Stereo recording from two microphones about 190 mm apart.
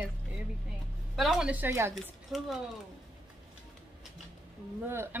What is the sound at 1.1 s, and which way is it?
Speech, centre (ahead or behind).